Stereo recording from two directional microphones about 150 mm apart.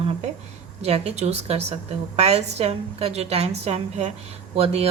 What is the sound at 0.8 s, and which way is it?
Speech, 45° right (ahead or behind).